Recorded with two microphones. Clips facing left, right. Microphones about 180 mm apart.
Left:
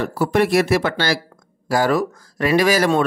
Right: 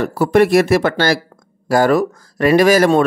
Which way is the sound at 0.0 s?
50° right (ahead or behind).